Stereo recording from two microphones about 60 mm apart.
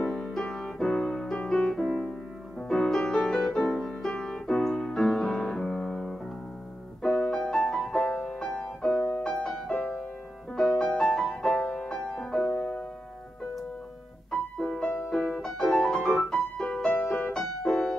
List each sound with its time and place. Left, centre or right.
0.0 s music: centre
4.0 s piano: centre
7.2 s music: centre
8.9 s music: left
9.2 s music: centre
11.5 s music: centre
12.4 s music: left
14.3 s music: centre